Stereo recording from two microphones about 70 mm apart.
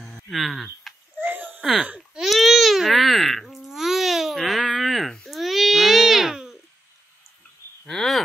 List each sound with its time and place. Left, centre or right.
0.0 s a sound: centre
1.2 s a sound: right
1.6 s speech: centre
2.0 s baby cry: centre
5.3 s babbling: centre
7.8 s speech: centre